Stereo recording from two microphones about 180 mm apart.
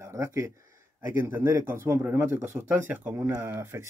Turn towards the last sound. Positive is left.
turn(degrees=-15)  # may be behind; listen again after turning